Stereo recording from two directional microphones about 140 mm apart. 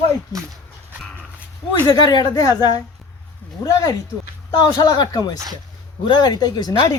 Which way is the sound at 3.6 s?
25° left (ahead or behind).